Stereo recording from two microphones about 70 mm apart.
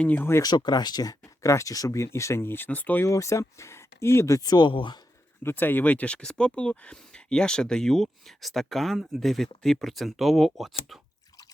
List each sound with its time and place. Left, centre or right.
0.0 s speech: left
0.4 s speech: left
3.0 s speech: left
4.4 s speech: left
5.4 s speech: left; by 11.0 s centre